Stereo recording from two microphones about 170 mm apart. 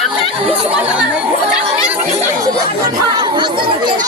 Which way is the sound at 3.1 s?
25° right (ahead or behind).